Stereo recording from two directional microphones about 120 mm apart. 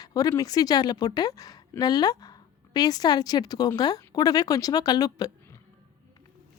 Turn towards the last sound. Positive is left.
turn(degrees=35)  # may be behind; listen again after turning